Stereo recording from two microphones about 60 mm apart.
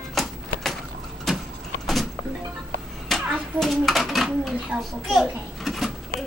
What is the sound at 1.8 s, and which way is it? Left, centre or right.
Vehicle, centre.